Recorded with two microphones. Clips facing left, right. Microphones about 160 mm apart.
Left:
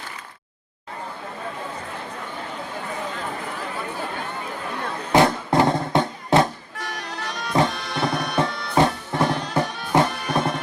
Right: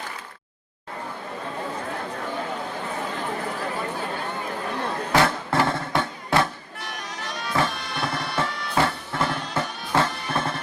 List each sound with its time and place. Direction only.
5.1 s music: 20° left (ahead or behind)
7.5 s music: 20° left (ahead or behind)